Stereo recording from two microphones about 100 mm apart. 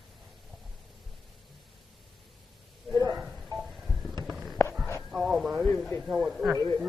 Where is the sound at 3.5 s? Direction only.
Centre (ahead or behind).